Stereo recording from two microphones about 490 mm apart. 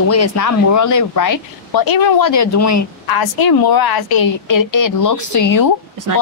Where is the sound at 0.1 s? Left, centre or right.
Left.